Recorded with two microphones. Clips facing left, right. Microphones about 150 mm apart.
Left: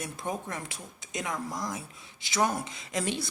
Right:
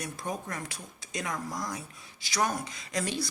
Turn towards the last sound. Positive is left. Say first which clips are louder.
# left 1 dB
turn(degrees=20)  # may be behind; listen again after turning